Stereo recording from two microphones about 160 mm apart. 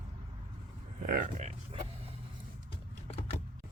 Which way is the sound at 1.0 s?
60° right (ahead or behind).